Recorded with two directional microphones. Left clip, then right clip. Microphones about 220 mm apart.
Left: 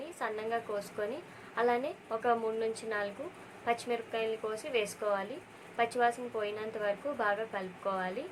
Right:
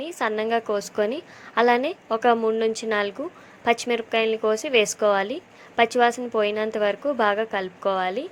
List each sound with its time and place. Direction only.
0.0 s a woman's voice: 35° right (ahead or behind)